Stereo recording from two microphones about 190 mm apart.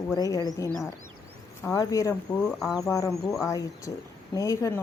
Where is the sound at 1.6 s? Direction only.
15° left (ahead or behind).